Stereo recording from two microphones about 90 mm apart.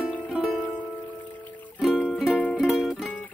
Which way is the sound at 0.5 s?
15° left (ahead or behind).